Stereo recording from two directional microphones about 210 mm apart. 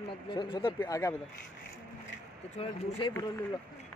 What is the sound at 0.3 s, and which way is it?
Speech, 20° left (ahead or behind).